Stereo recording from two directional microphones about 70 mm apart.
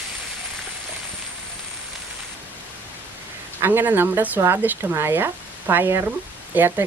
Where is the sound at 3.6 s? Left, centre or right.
Right.